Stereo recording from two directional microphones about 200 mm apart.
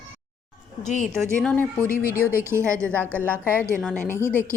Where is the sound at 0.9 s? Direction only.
35° left (ahead or behind).